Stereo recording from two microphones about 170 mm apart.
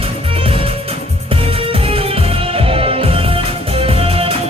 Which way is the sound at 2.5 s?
35° right (ahead or behind).